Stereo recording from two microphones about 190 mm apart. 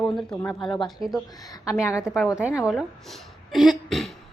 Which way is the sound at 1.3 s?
20° left (ahead or behind).